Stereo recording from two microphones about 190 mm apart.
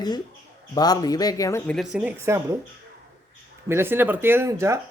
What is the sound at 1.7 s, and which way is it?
Speech, 5° right (ahead or behind).